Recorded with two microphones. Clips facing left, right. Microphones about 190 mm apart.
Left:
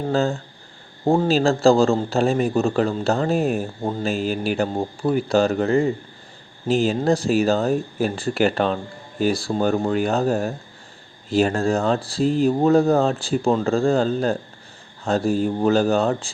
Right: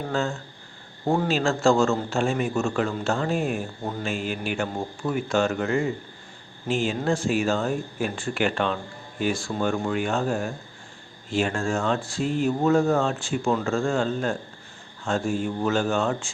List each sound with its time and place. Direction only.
0.1 s a man's voice: 35° left (ahead or behind)